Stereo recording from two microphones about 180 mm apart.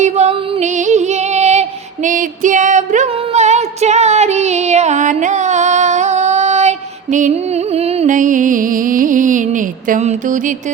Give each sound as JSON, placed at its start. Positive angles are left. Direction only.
{"t": 0.0, "sound": "music", "side_deg": -40}
{"t": 2.0, "sound": "female singing", "side_deg": -45}